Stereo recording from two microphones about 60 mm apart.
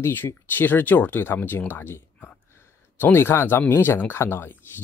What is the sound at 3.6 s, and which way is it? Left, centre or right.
Speech, left.